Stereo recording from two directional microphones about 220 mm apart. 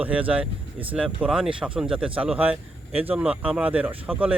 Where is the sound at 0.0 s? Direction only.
5° right (ahead or behind).